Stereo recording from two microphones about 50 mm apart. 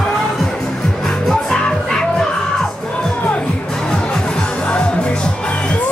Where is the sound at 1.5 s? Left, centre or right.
Centre.